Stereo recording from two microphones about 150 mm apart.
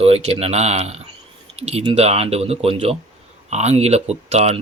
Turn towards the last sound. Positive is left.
turn(degrees=-45)  # may be behind; listen again after turning